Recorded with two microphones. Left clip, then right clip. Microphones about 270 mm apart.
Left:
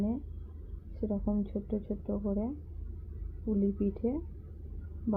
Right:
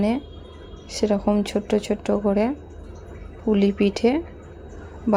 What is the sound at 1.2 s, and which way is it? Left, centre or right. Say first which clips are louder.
Speech: right 14 dB; right.